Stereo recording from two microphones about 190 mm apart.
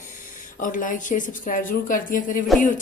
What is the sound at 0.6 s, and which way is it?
A woman's voice, 45° left (ahead or behind).